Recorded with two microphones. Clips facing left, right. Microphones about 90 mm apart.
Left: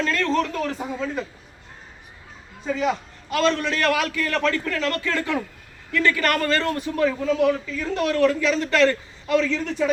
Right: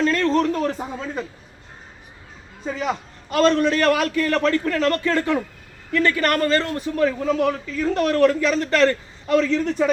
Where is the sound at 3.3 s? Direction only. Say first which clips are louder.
Right 4 dB; 40° right (ahead or behind).